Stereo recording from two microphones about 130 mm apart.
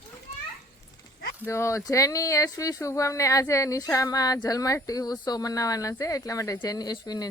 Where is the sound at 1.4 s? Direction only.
20° left (ahead or behind).